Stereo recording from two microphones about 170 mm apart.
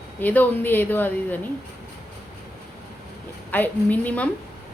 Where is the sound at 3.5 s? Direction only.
10° left (ahead or behind).